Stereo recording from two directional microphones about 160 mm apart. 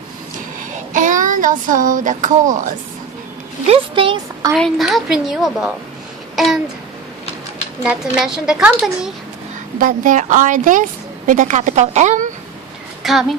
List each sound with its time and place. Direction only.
0.6 s child singing: 55° right (ahead or behind)
3.7 s a woman's voice: 35° right (ahead or behind)
4.5 s a woman's voice: centre (ahead or behind)
6.3 s a sound: centre (ahead or behind)
7.9 s a woman's voice: 5° right (ahead or behind)
9.8 s a woman's voice: 55° right (ahead or behind)
13.0 s speech: centre (ahead or behind)